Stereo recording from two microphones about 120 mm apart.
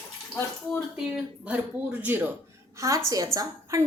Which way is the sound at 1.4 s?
10° right (ahead or behind).